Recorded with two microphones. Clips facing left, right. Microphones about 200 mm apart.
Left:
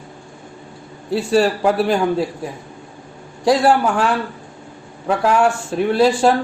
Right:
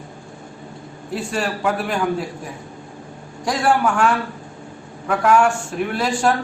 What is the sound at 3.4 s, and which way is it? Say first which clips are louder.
A man's voice: left 4 dB; 35° left (ahead or behind).